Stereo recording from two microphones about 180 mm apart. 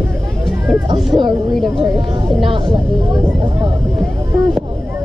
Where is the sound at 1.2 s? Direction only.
Centre (ahead or behind).